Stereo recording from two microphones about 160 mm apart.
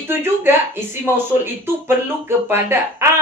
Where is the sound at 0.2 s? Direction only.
15° right (ahead or behind).